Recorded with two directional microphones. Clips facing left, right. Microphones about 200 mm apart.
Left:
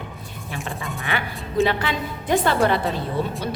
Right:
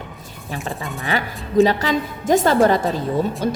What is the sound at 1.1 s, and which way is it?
A woman's voice, 40° right (ahead or behind).